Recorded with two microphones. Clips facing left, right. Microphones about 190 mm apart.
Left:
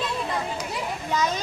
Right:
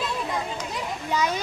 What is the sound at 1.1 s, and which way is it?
Children playing, 10° right (ahead or behind).